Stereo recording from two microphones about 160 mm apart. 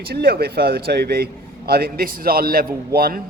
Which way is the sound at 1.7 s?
75° right (ahead or behind).